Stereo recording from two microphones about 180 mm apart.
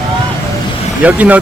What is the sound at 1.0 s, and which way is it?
Speech, 10° right (ahead or behind).